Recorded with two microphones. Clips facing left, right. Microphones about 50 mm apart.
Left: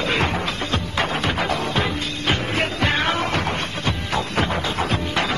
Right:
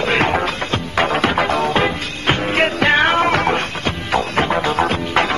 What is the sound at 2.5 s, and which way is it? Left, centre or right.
Music, right.